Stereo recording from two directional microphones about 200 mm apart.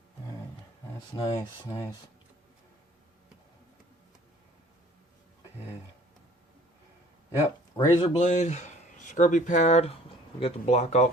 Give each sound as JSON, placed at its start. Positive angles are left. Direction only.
{"t": 1.1, "sound": "speech", "side_deg": 25}
{"t": 7.8, "sound": "speech", "side_deg": 30}